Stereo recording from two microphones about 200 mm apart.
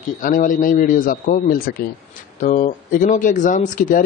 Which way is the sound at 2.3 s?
35° left (ahead or behind).